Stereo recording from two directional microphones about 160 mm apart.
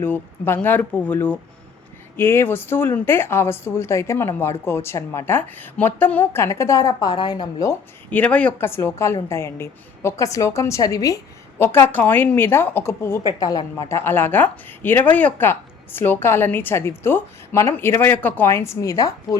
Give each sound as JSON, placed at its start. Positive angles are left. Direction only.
{"t": 0.0, "sound": "a woman's voice", "side_deg": 15}